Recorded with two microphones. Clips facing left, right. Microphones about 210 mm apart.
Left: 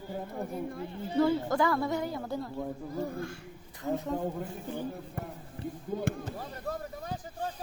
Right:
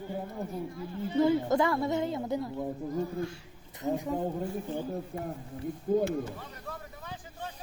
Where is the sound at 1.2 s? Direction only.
20° right (ahead or behind).